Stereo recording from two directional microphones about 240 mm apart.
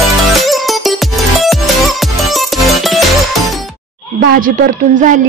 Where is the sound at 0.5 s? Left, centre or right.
Centre.